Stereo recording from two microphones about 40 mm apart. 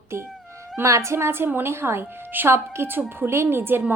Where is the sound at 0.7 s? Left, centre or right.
Right.